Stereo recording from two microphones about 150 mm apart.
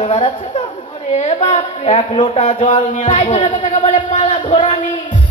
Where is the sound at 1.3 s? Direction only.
45° left (ahead or behind).